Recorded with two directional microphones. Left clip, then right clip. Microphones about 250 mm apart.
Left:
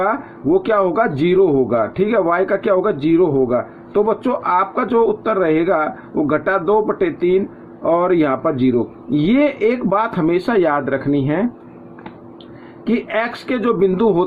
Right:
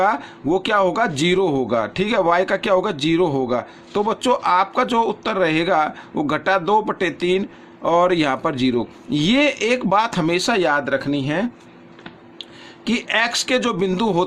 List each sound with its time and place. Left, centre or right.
0.0 s a man's voice: right
12.8 s a man's voice: right